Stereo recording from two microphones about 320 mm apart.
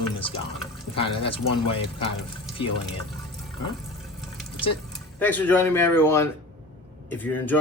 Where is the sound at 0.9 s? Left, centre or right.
Centre.